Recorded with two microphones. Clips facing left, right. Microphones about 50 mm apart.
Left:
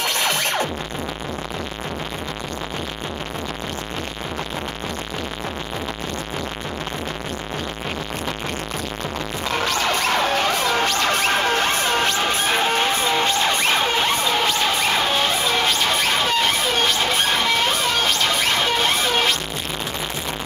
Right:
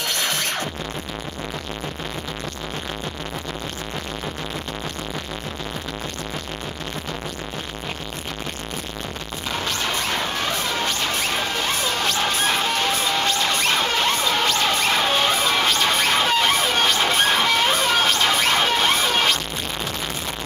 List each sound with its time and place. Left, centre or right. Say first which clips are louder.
11.4 s music: left 4 dB; left
12.3 s music: left 2 dB; left; by 19.3 s centre